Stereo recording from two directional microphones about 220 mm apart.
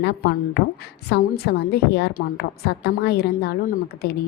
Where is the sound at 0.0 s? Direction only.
45° left (ahead or behind).